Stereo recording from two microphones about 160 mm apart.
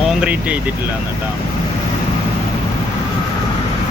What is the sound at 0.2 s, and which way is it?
Speech, 10° right (ahead or behind).